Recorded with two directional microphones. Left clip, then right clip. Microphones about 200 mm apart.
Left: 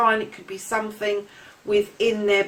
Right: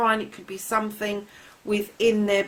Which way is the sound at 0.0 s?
45° right (ahead or behind).